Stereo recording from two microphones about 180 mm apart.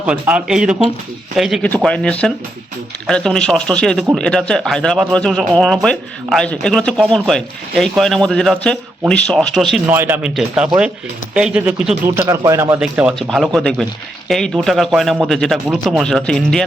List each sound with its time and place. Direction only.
0.0 s speech: 5° right (ahead or behind)
9.9 s speech: 10° right (ahead or behind)
12.8 s speech: 5° right (ahead or behind)